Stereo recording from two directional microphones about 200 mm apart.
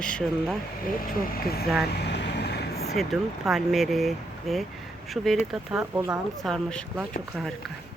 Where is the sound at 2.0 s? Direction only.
60° left (ahead or behind).